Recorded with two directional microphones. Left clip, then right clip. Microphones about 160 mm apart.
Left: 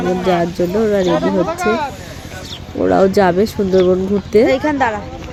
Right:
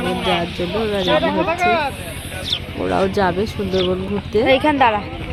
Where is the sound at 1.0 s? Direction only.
85° left.